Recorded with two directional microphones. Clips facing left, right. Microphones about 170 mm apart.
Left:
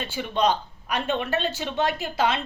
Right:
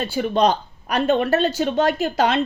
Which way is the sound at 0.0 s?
40° right (ahead or behind).